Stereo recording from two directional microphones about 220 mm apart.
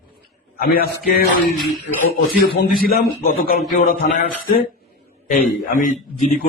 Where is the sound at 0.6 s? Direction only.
45° left (ahead or behind).